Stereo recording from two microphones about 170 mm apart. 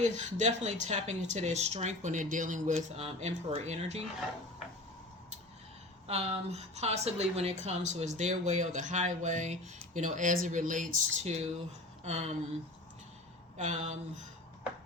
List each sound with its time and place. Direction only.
0.0 s a woman's voice: 45° right (ahead or behind)
6.1 s a woman's voice: 40° right (ahead or behind)
12.0 s a sound: 40° right (ahead or behind)
13.6 s a woman's voice: 45° right (ahead or behind)